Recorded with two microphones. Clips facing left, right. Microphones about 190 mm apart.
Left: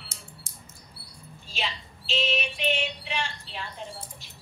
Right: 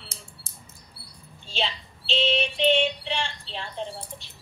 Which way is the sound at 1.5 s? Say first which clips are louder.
Right 4 dB; 30° right (ahead or behind).